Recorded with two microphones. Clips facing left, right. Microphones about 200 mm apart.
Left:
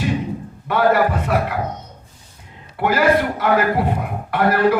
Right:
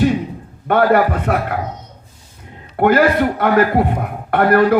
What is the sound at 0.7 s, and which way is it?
Speech, 55° right (ahead or behind).